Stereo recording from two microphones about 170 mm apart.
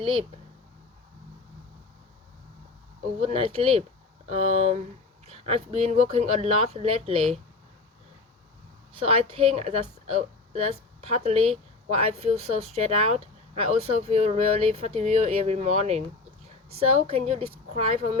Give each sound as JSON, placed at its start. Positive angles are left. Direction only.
{"t": 0.0, "sound": "speech", "side_deg": -35}
{"t": 3.2, "sound": "speech", "side_deg": -35}
{"t": 9.0, "sound": "speech", "side_deg": -35}